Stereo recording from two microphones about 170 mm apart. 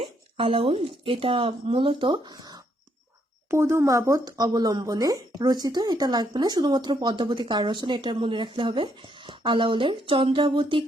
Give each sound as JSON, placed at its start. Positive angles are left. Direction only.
{"t": 0.0, "sound": "speech", "side_deg": -35}